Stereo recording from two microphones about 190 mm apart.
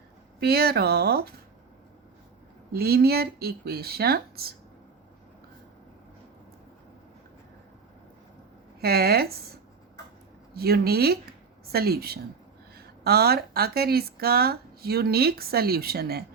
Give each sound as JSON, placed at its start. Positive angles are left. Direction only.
{"t": 0.3, "sound": "speech", "side_deg": -55}
{"t": 2.7, "sound": "speech", "side_deg": -55}
{"t": 8.8, "sound": "speech", "side_deg": -55}
{"t": 10.5, "sound": "speech", "side_deg": -55}